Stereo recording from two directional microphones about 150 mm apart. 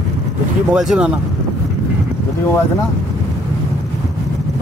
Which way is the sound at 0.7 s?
5° right (ahead or behind).